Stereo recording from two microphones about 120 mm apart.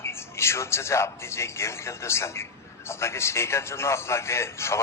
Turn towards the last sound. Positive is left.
turn(degrees=25)  # may be behind; listen again after turning